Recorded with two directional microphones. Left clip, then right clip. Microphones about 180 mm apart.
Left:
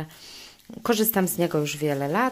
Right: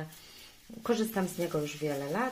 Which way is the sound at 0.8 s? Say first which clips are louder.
Left 8 dB; 60° left (ahead or behind).